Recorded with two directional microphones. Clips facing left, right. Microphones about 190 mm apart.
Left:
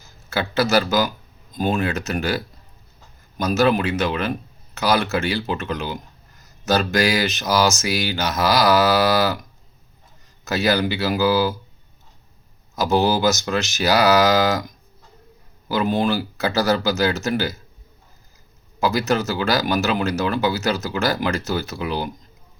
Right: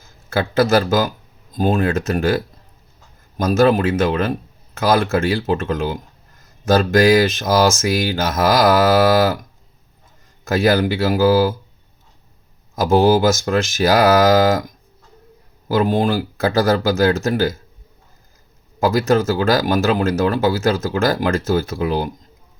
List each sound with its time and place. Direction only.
0.0 s speech: 50° right (ahead or behind)
3.3 s speech: 50° right (ahead or behind)
12.7 s speech: 50° right (ahead or behind)
15.7 s speech: 50° right (ahead or behind)
18.8 s speech: 50° right (ahead or behind)